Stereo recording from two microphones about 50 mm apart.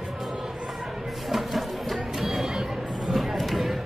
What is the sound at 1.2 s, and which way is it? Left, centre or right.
Music, centre.